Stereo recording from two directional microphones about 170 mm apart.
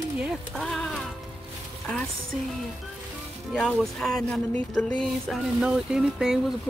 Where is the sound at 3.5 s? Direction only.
Centre (ahead or behind).